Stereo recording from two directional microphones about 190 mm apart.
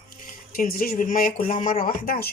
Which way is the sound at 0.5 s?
50° left (ahead or behind).